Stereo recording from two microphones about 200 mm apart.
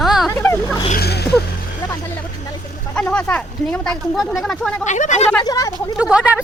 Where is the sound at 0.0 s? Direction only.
Centre (ahead or behind).